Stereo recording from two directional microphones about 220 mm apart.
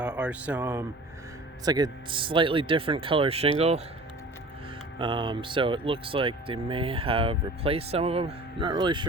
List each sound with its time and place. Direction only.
0.0 s speech: 5° right (ahead or behind); by 3.5 s 25° right (ahead or behind)
4.9 s speech: 20° right (ahead or behind)